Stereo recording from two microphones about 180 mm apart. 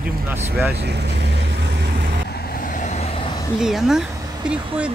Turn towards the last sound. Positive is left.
turn(degrees=-5)  # may be behind; listen again after turning